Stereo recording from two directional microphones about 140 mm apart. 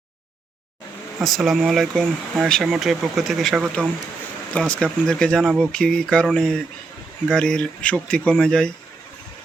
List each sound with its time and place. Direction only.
1.2 s speech: centre (ahead or behind)